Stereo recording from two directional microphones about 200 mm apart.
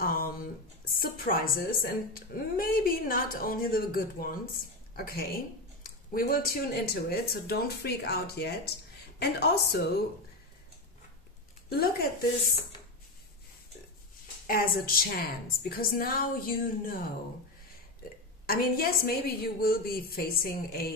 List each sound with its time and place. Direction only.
0.0 s a sound: 45° left (ahead or behind)
0.8 s a woman's voice: 45° left (ahead or behind)
11.7 s a woman's voice: 50° left (ahead or behind)
14.5 s a woman's voice: 45° left (ahead or behind)
18.5 s a woman's voice: 45° left (ahead or behind)